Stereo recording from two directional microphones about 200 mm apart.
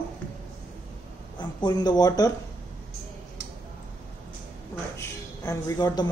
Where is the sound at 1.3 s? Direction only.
20° left (ahead or behind).